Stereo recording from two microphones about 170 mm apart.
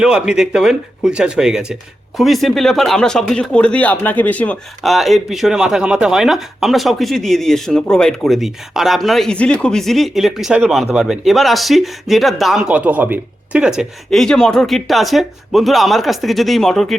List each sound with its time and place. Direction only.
0.0 s speech: 5° right (ahead or behind)